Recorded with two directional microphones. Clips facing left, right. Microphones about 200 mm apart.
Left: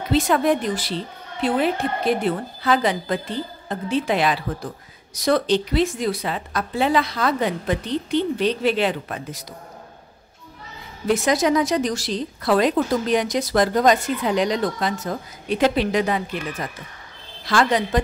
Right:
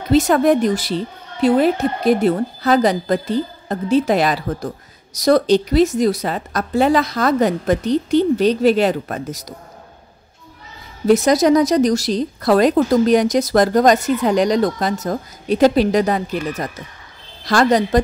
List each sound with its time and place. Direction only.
0.1 s a woman's voice: 45° right (ahead or behind)
11.1 s a woman's voice: 40° right (ahead or behind)